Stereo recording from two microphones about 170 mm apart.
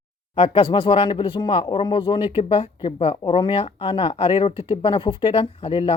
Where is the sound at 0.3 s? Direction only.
35° left (ahead or behind).